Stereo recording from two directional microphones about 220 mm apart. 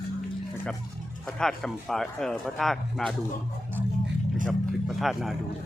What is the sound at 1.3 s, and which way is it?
Speech, centre (ahead or behind).